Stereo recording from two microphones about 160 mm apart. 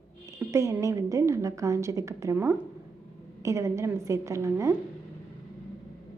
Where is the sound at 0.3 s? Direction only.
20° right (ahead or behind).